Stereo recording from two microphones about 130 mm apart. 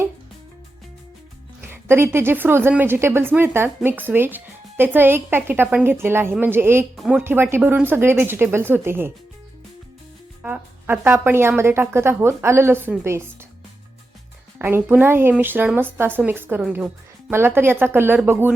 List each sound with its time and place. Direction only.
1.6 s a woman's voice: 20° right (ahead or behind)
6.9 s speech: centre (ahead or behind)
7.2 s a woman's voice: 15° right (ahead or behind)
10.4 s a woman's voice: 15° right (ahead or behind)
14.6 s a woman's voice: 15° right (ahead or behind)